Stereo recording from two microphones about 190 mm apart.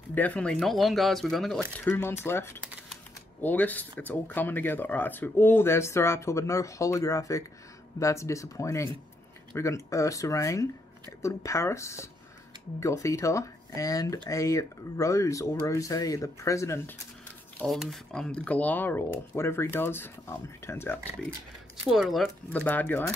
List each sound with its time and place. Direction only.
0.1 s speech: 10° left (ahead or behind)
17.6 s speech: centre (ahead or behind)
21.9 s speech: centre (ahead or behind)